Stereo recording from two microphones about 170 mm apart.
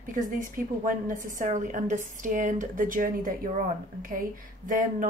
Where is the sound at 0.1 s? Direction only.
55° right (ahead or behind).